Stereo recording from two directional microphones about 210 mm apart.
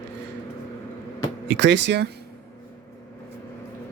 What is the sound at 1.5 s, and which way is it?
Speech, 55° right (ahead or behind).